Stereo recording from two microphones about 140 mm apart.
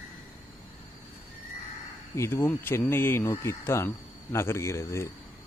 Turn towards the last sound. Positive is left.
turn(degrees=20)  # may be behind; listen again after turning